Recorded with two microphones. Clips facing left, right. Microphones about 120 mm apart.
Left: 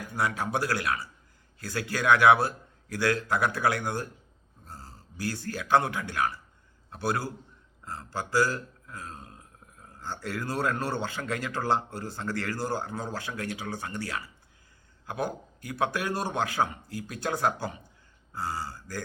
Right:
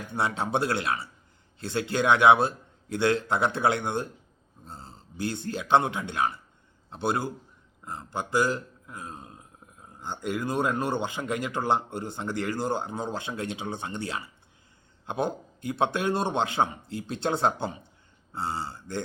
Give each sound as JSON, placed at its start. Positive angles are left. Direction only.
{"t": 0.1, "sound": "speech", "side_deg": -25}